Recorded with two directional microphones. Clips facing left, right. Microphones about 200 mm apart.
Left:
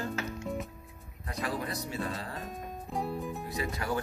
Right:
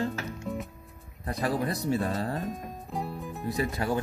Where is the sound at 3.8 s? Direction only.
30° right (ahead or behind).